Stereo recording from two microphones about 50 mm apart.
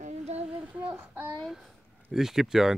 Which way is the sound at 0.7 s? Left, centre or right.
Right.